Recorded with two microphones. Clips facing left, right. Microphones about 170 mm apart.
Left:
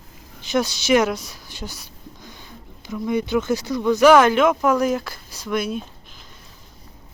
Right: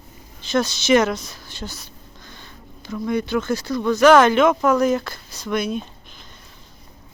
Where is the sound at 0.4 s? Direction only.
15° left (ahead or behind).